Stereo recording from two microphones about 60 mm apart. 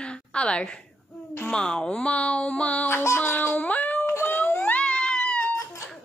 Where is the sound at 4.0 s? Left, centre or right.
Left.